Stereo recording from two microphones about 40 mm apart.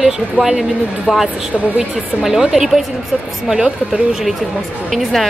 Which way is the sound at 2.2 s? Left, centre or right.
Centre.